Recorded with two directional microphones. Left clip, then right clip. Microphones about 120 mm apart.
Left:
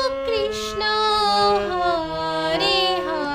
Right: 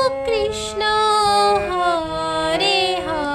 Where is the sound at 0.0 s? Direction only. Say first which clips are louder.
Right 3 dB; 25° right (ahead or behind).